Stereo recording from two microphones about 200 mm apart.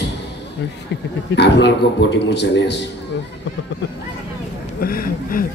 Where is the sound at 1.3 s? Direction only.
60° left (ahead or behind).